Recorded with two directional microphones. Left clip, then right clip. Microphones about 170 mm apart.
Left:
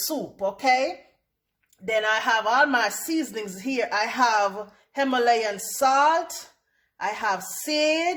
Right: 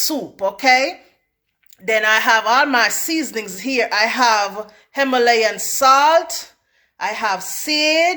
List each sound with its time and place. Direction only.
0.1 s speech: 15° right (ahead or behind)